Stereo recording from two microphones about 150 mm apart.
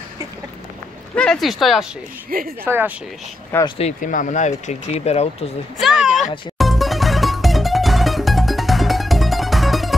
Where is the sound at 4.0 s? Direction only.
60° left (ahead or behind); by 5.5 s 45° left (ahead or behind).